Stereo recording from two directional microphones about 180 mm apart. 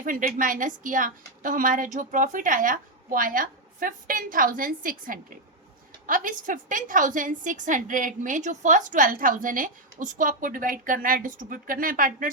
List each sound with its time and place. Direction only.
0.0 s a woman's voice: 50° right (ahead or behind)